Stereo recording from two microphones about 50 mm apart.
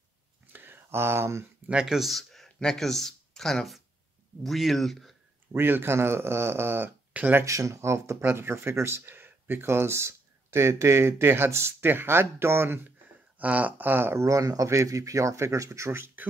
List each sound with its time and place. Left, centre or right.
0.5 s a sound: right
1.7 s speech: centre
5.5 s speech: right
7.4 s speech: right
8.2 s speech: right
13.4 s speech: right
14.1 s speech: right